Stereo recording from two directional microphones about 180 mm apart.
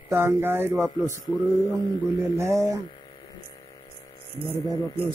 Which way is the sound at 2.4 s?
15° right (ahead or behind).